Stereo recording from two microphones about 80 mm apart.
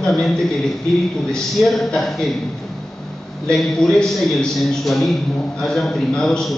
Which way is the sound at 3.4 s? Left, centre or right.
Centre.